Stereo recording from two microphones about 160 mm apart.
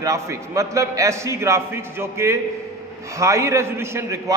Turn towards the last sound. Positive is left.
turn(degrees=-20)  # may be behind; listen again after turning